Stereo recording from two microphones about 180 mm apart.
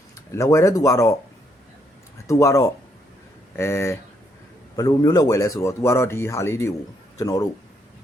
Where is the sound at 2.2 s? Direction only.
15° left (ahead or behind).